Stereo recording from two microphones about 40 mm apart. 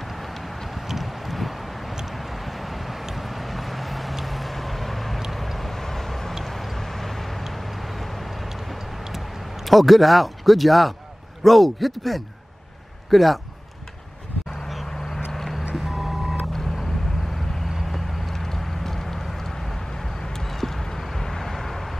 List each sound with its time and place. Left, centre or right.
0.0 s vehicle: centre
11.4 s a man's voice: centre
14.9 s quack: centre
15.3 s music: centre
15.7 s vehicle: centre
17.7 s vehicle: centre